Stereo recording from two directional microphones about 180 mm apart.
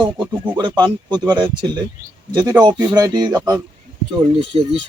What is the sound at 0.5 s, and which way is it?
Speech, 25° right (ahead or behind).